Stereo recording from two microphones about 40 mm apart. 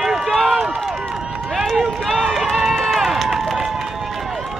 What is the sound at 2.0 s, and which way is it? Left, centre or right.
Run, centre.